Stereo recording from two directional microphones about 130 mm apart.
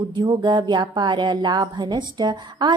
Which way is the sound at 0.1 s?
35° right (ahead or behind).